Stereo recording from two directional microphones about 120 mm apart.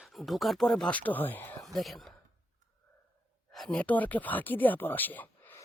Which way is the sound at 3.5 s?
5° left (ahead or behind).